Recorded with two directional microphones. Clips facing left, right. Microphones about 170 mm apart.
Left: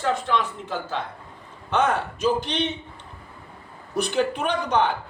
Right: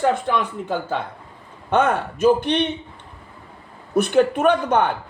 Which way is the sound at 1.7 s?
55° right (ahead or behind).